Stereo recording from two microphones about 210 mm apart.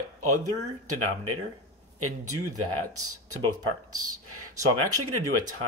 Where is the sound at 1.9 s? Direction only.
90° right.